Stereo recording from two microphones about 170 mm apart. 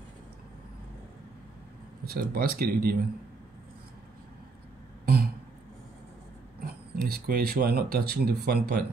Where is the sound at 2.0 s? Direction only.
60° right (ahead or behind).